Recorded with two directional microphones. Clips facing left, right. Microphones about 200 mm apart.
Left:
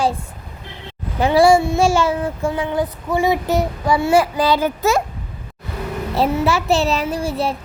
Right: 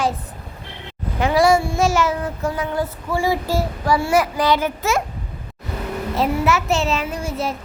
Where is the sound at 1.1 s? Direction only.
30° left (ahead or behind).